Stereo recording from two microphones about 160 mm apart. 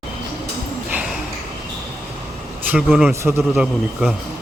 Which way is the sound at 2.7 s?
5° right (ahead or behind).